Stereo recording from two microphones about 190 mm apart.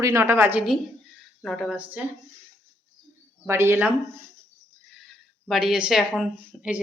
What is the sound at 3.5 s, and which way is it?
Speech, 15° right (ahead or behind).